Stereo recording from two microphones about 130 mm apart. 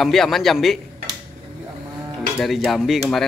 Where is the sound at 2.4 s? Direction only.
Centre (ahead or behind).